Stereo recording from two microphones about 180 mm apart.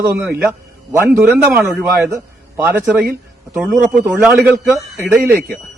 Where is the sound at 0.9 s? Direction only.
15° right (ahead or behind).